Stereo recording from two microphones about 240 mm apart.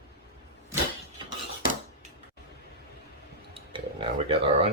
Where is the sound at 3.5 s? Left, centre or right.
Right.